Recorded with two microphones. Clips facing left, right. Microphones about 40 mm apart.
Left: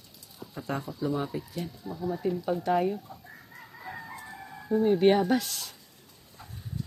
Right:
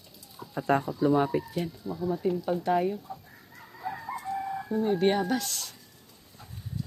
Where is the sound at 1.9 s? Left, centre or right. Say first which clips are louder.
Right 1 dB; centre.